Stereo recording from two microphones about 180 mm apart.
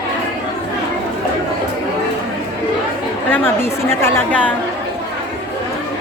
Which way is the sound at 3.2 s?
10° left (ahead or behind).